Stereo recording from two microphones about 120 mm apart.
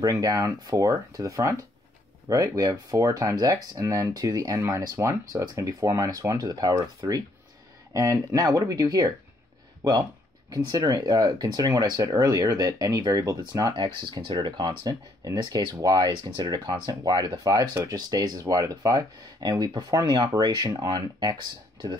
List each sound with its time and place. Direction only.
0.0 s speech: 30° right (ahead or behind)